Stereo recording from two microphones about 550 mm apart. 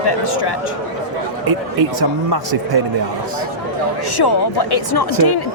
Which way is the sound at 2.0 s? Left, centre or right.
Right.